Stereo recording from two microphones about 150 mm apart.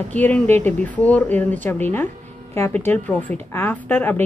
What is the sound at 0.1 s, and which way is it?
Speech, 10° left (ahead or behind).